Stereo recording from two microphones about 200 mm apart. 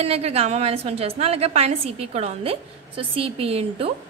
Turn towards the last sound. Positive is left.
turn(degrees=-30)  # may be behind; listen again after turning